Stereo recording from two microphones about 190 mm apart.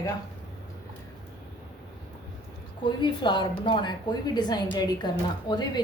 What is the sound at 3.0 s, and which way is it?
A woman's voice, 25° left (ahead or behind).